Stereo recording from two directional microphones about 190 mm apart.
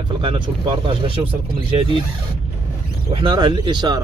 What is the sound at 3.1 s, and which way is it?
Speech, 25° right (ahead or behind).